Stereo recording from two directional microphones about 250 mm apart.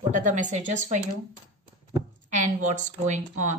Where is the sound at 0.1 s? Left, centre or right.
Right.